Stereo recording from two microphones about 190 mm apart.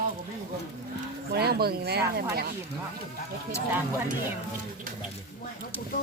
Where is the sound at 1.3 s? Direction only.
55° right (ahead or behind).